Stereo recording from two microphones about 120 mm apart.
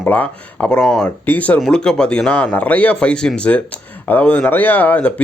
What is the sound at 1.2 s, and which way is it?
Speech, 10° left (ahead or behind).